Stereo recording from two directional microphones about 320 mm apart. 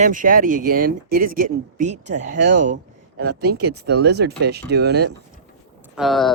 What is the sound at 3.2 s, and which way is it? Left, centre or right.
Speech, right.